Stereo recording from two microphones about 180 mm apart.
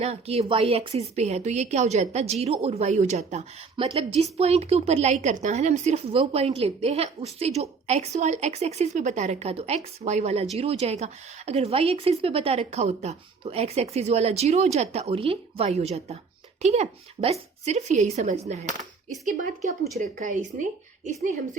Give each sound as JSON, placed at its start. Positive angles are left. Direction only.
{"t": 0.0, "sound": "a woman's voice", "side_deg": -35}
{"t": 20.0, "sound": "a woman's voice", "side_deg": -45}